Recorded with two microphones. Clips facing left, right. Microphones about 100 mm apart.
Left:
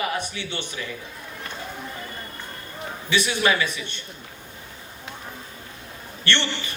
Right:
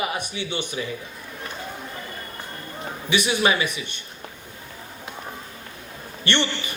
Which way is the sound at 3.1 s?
15° right (ahead or behind).